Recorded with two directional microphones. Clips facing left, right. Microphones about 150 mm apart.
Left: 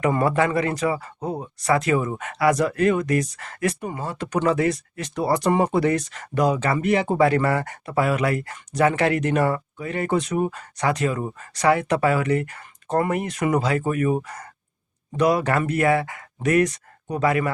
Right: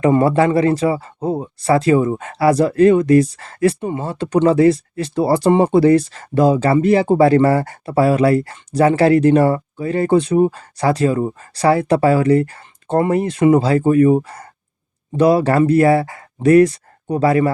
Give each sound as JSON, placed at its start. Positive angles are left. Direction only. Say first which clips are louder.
{"t": 0.0, "sound": "speech", "louder": "right 7 dB", "side_deg": -30}